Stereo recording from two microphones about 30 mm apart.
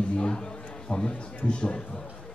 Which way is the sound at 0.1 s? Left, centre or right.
Left.